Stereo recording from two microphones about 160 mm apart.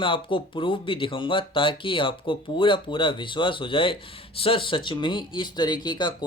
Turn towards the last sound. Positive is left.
turn(degrees=30)  # may be behind; listen again after turning